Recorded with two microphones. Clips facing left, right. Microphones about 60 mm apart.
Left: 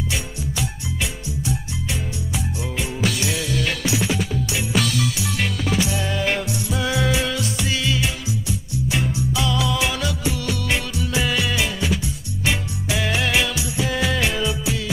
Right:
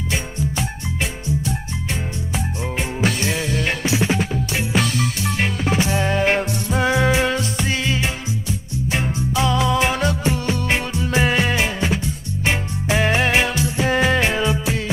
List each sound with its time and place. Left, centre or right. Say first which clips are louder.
1.2 s music: right 3 dB; right